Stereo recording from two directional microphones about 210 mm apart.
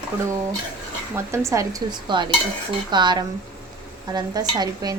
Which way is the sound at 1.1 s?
15° right (ahead or behind).